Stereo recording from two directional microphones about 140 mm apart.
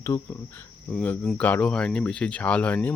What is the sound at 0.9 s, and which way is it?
Speech, 5° left (ahead or behind).